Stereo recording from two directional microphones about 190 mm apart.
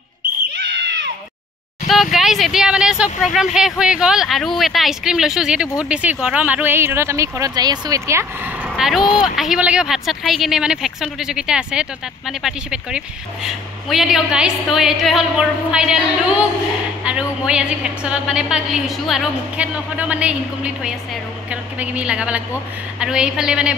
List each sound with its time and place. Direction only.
0.6 s a sound: 65° right (ahead or behind)
1.9 s speech: centre (ahead or behind)
8.6 s speech: 5° right (ahead or behind)